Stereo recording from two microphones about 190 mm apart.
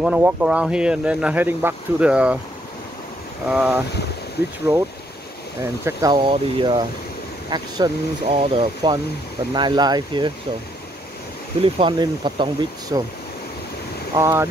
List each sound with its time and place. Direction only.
0.0 s speech: 5° right (ahead or behind)
3.4 s speech: 5° right (ahead or behind)
5.6 s speech: 15° right (ahead or behind)
11.6 s speech: 25° right (ahead or behind)
14.1 s speech: 15° right (ahead or behind)